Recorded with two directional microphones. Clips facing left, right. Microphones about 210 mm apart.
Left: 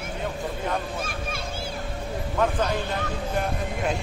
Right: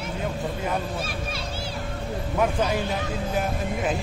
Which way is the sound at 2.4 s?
10° right (ahead or behind).